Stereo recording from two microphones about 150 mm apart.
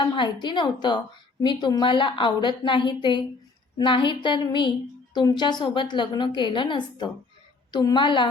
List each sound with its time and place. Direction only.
0.0 s a woman's voice: 30° left (ahead or behind)